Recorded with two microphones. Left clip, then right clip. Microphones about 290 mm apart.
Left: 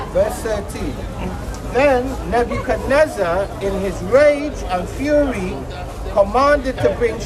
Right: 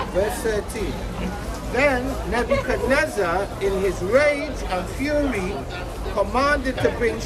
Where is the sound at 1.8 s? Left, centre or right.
Centre.